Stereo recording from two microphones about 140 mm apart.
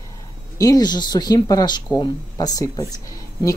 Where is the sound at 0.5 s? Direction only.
25° left (ahead or behind).